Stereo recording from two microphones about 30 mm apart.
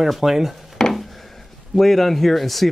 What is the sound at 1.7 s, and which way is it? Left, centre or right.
Speech, centre.